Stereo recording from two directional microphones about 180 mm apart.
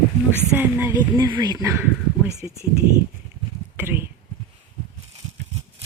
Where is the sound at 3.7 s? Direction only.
10° right (ahead or behind).